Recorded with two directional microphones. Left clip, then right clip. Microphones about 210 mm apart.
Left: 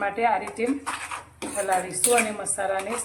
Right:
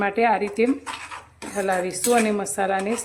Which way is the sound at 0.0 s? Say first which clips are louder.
Right 3 dB; 50° right (ahead or behind).